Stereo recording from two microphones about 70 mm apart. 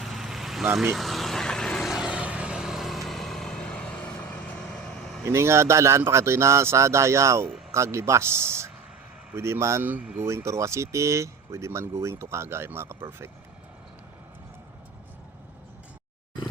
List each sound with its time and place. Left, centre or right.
0.0 s vehicle: centre
1.9 s vehicle: centre; by 4.6 s left
4.6 s vehicle: centre
5.2 s speech: right
9.8 s speech: right
10.2 s speech: right